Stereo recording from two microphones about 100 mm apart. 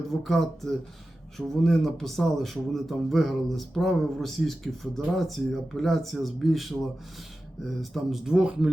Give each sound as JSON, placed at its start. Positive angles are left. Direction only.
{"t": 0.2, "sound": "a man's voice", "side_deg": 0}
{"t": 7.8, "sound": "speech", "side_deg": 0}